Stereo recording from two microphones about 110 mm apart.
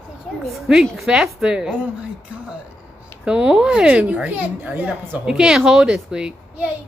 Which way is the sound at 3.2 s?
10° right (ahead or behind).